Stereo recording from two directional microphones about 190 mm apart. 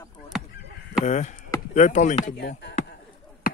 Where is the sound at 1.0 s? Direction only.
40° left (ahead or behind).